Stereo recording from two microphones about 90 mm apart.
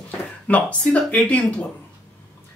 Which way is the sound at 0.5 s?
15° left (ahead or behind).